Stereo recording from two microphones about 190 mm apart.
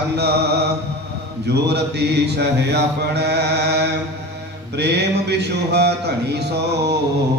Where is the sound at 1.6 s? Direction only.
60° right (ahead or behind).